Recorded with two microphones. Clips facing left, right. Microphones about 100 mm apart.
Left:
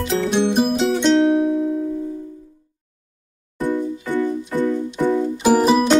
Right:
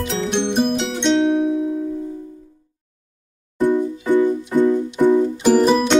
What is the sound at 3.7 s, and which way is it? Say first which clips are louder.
Music: right 4 dB; 15° right (ahead or behind).